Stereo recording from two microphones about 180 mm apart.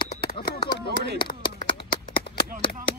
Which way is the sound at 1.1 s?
25° left (ahead or behind).